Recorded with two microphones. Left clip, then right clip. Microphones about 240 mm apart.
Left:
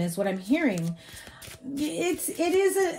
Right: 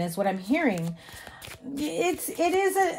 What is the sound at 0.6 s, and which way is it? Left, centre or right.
A woman's voice, right.